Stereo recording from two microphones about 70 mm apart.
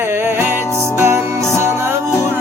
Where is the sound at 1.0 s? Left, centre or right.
Right.